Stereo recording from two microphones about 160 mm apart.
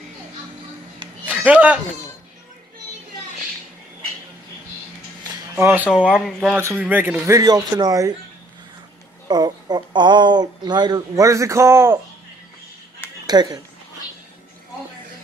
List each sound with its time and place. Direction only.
1.3 s speech: 10° right (ahead or behind)
5.6 s speech: 10° right (ahead or behind)
9.3 s speech: 25° right (ahead or behind)
13.3 s speech: 25° right (ahead or behind)